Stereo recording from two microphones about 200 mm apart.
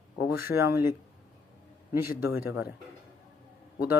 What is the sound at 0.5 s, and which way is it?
Speech, 15° right (ahead or behind).